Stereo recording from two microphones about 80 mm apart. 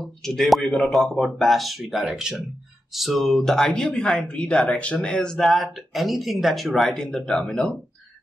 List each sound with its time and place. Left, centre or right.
0.0 s speech: centre